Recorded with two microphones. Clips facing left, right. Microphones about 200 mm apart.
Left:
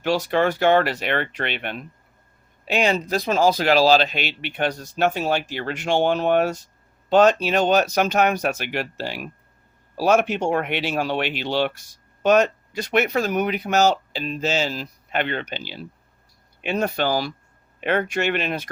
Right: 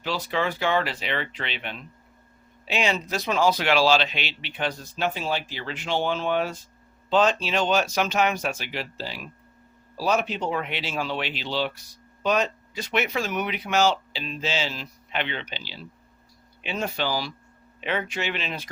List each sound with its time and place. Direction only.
0.0 s speech: 55° left (ahead or behind)
4.9 s speech: 50° left (ahead or behind)
7.1 s speech: 60° left (ahead or behind)
12.7 s speech: 45° left (ahead or behind)